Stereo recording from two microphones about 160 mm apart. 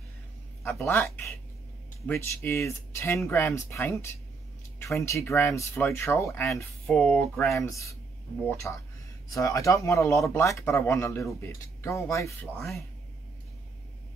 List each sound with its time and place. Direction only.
0.7 s speech: 15° left (ahead or behind)
6.9 s speech: 5° left (ahead or behind)
7.6 s speech: 20° left (ahead or behind)
12.5 s speech: centre (ahead or behind)